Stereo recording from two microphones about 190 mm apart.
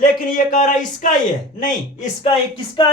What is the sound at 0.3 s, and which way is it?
Speech, 45° left (ahead or behind).